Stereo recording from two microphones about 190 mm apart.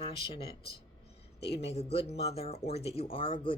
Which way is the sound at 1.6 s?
35° left (ahead or behind).